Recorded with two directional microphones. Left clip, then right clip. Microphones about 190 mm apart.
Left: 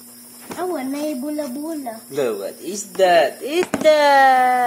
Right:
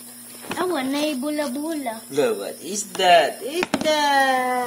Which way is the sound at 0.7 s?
25° right (ahead or behind).